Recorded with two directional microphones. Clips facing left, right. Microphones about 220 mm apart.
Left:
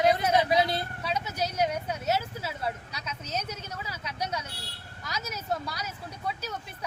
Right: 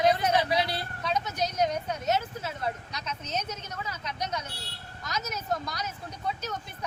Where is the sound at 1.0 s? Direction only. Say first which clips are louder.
Right 5 dB; 10° left (ahead or behind).